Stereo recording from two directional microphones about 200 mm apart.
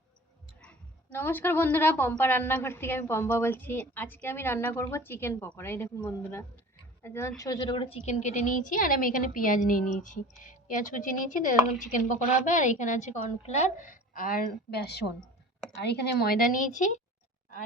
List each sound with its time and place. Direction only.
0.6 s a woman's voice: 10° left (ahead or behind); by 17.0 s 40° left (ahead or behind)